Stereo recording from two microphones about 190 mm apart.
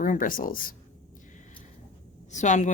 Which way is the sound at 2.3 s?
40° left (ahead or behind).